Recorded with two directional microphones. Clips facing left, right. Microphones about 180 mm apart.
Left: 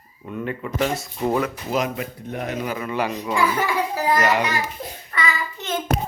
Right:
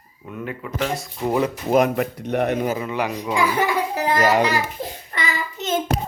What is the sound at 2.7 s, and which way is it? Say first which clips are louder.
Speech: even; 20° right (ahead or behind).